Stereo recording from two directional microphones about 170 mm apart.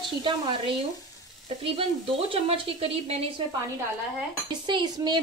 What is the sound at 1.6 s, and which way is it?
A woman's voice, 35° right (ahead or behind).